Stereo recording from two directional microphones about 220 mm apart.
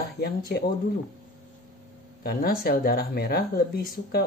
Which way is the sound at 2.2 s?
45° left (ahead or behind).